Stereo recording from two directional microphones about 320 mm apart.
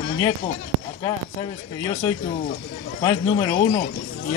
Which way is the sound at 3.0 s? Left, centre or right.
Centre.